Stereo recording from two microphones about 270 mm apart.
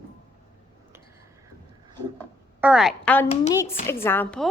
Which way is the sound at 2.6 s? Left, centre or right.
Centre.